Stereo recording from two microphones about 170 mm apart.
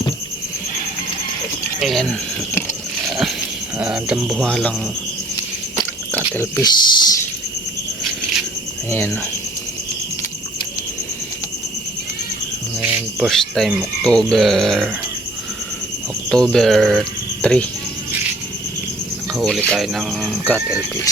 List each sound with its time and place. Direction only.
1.8 s speech: centre (ahead or behind)
3.1 s a sound: centre (ahead or behind)
3.8 s speech: 5° right (ahead or behind)
6.3 s speech: 20° left (ahead or behind)
8.9 s speech: 15° left (ahead or behind)
12.8 s speech: 5° right (ahead or behind)
16.3 s speech: 5° left (ahead or behind)
19.3 s cricket: centre (ahead or behind)
19.7 s speech: centre (ahead or behind)